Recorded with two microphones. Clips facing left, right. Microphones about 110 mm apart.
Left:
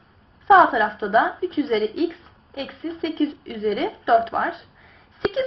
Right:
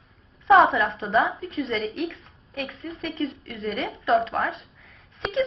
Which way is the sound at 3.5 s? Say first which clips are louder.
Left 6 dB; 20° left (ahead or behind).